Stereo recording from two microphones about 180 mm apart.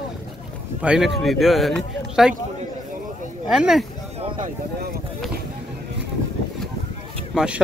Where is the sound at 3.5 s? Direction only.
5° right (ahead or behind).